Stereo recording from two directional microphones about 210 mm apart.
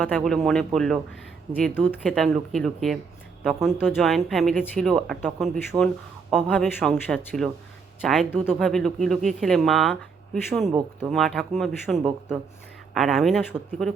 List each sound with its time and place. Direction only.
0.0 s speech: centre (ahead or behind)